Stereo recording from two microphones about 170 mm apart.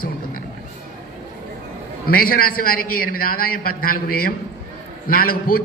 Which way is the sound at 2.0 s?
60° left (ahead or behind).